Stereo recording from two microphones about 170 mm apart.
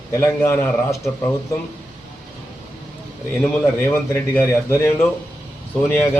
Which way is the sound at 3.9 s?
15° left (ahead or behind).